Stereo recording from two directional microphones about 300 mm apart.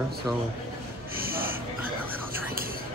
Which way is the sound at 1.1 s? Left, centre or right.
Right.